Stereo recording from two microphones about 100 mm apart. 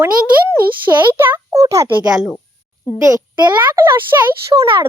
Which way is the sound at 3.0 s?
35° right (ahead or behind).